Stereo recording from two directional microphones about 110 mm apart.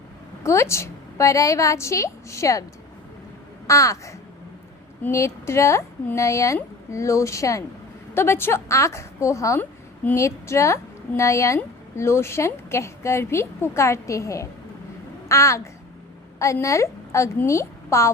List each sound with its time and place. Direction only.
0.4 s a woman's voice: 25° left (ahead or behind)
3.7 s a woman's voice: 30° left (ahead or behind)
9.6 s a sound: 15° left (ahead or behind)
10.2 s a woman's voice: 25° left (ahead or behind)